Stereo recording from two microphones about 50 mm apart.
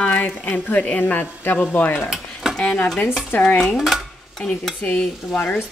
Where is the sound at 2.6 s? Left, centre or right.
Centre.